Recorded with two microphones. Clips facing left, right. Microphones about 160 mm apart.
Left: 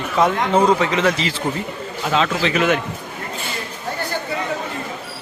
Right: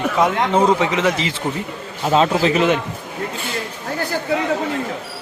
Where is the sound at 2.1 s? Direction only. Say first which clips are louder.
Right 4 dB; 35° right (ahead or behind).